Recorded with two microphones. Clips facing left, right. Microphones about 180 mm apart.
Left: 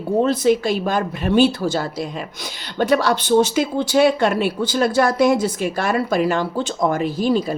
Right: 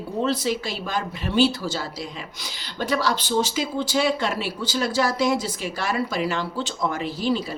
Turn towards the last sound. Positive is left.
turn(degrees=45)  # may be behind; listen again after turning